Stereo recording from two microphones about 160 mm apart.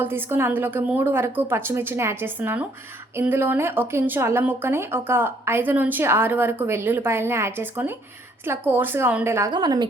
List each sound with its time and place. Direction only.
0.0 s speech: 15° right (ahead or behind)
9.5 s a woman's voice: 25° right (ahead or behind)